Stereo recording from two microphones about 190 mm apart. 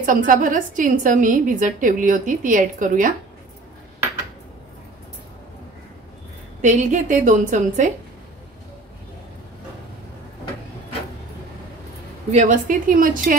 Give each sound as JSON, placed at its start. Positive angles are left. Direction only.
{"t": 0.0, "sound": "a woman's voice", "side_deg": -45}
{"t": 6.6, "sound": "a woman's voice", "side_deg": -40}
{"t": 12.3, "sound": "a woman's voice", "side_deg": -40}